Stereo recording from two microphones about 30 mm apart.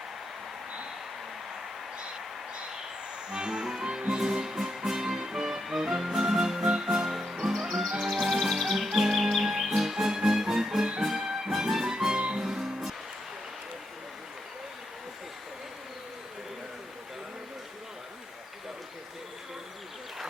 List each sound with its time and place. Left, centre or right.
3.3 s music: right
7.1 s music: centre
8.1 s music: centre
12.1 s music: right